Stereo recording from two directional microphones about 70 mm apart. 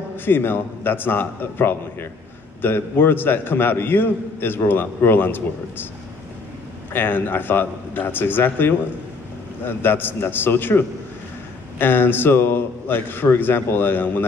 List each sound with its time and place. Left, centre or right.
0.1 s a man's voice: left
6.9 s a man's voice: left